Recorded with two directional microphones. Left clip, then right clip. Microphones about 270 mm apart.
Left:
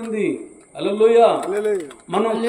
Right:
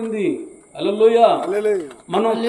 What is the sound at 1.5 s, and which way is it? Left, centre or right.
Speech, right.